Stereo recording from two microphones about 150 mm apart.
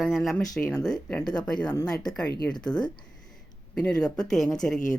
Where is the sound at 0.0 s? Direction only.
Centre (ahead or behind).